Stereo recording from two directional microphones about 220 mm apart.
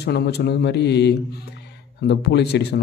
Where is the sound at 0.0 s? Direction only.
50° left (ahead or behind).